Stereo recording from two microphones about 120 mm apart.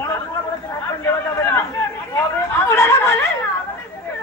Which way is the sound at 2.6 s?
25° left (ahead or behind).